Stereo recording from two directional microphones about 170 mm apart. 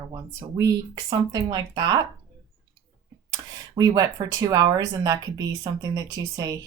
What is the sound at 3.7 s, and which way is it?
Speech, 20° right (ahead or behind).